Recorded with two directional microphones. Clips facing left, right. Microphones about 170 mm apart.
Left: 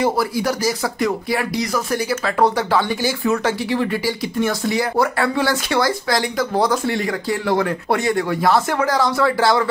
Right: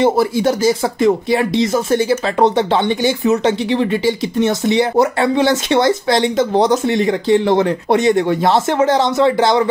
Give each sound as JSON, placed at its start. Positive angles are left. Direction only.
{"t": 0.0, "sound": "speech", "side_deg": -25}